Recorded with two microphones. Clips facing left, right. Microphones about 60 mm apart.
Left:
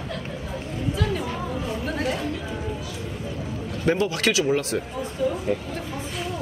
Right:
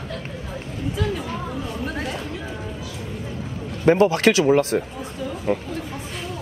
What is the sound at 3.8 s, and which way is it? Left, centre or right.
A man's voice, right.